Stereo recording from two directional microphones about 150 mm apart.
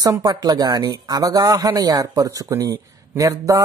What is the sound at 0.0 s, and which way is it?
Speech, 25° right (ahead or behind).